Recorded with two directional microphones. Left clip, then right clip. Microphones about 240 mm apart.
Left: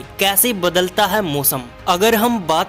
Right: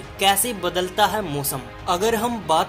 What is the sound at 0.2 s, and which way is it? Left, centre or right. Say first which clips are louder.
Speech: left 3 dB; left.